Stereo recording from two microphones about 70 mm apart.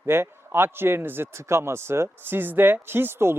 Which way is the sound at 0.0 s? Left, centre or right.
Right.